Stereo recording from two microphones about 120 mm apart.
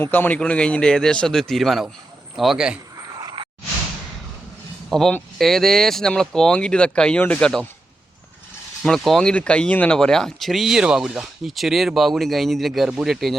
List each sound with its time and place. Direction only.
0.0 s speech: 15° left (ahead or behind); by 2.7 s 5° right (ahead or behind)
3.2 s a sound: 35° right (ahead or behind)
4.9 s speech: 5° left (ahead or behind)
8.8 s speech: 5° left (ahead or behind)